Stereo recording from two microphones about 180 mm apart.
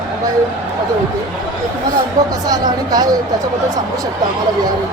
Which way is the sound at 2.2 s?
20° right (ahead or behind).